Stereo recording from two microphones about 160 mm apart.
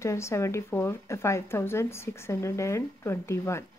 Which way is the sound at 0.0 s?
15° left (ahead or behind).